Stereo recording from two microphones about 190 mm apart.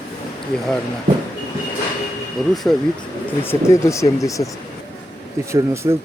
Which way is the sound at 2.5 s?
Centre (ahead or behind).